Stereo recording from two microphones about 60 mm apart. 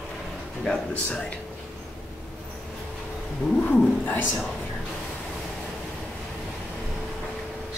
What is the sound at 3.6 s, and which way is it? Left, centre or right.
Speech, left.